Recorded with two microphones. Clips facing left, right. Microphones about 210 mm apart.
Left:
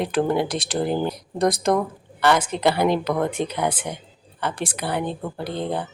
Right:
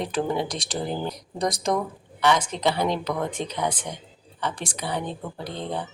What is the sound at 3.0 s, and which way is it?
Speech, 60° left (ahead or behind).